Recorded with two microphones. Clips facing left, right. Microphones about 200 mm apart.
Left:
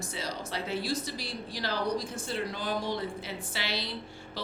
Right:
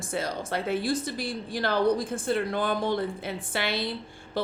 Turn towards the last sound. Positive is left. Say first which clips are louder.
# right 9 dB
turn(degrees=-55)  # may be behind; listen again after turning